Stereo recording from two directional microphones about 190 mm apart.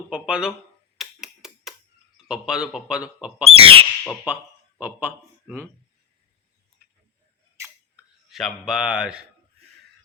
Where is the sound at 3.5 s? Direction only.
30° right (ahead or behind).